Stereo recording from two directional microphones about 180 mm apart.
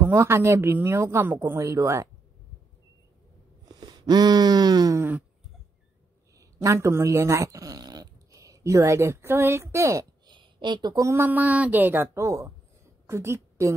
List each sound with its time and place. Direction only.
0.0 s speech: 15° right (ahead or behind)
3.6 s a sound: 20° right (ahead or behind)
6.3 s a woman's voice: 15° right (ahead or behind)